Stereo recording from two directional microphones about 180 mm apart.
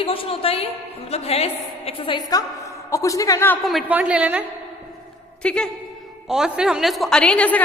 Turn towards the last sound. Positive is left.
turn(degrees=10)  # may be behind; listen again after turning